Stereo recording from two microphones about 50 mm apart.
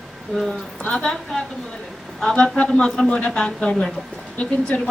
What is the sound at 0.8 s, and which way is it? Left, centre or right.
Speech, left.